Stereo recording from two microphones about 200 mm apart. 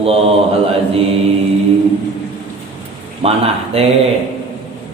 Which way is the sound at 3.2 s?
30° right (ahead or behind).